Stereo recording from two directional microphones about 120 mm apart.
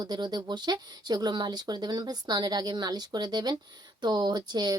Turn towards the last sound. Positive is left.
turn(degrees=-35)  # may be behind; listen again after turning